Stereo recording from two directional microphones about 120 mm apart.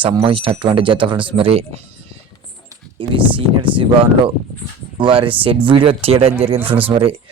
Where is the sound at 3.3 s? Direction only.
45° right (ahead or behind).